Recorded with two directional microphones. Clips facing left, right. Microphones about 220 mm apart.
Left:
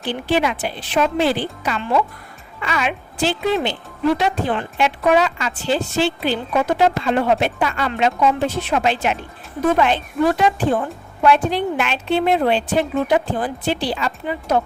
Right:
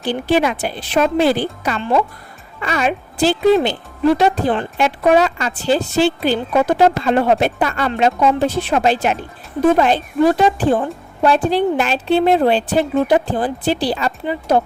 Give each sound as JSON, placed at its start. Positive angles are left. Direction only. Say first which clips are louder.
{"t": 0.0, "sound": "a woman's voice", "louder": "right 3 dB", "side_deg": -40}